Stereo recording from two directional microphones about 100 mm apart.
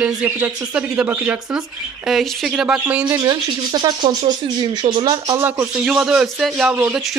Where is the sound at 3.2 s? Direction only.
45° right (ahead or behind).